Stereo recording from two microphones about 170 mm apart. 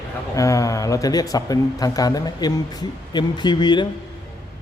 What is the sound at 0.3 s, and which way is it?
A man's voice, 20° left (ahead or behind).